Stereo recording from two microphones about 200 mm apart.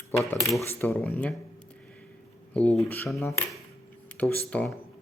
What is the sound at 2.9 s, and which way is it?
Speech, 5° left (ahead or behind).